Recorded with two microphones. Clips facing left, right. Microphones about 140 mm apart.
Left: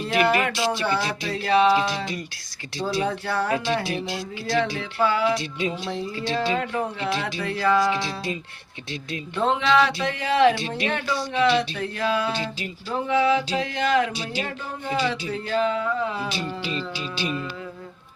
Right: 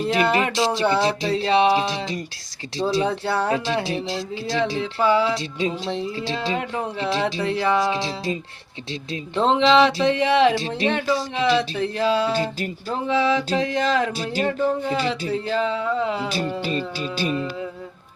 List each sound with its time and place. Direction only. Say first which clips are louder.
0.1 s speech: left 1 dB; 25° right (ahead or behind)
12.3 s speech: right 5 dB; 45° right (ahead or behind)
13.1 s speech: even; 30° right (ahead or behind)
13.5 s music: right 2 dB; 35° right (ahead or behind)
15.3 s speech: right 1 dB; 25° right (ahead or behind)
16.6 s music: right 4 dB; 45° right (ahead or behind)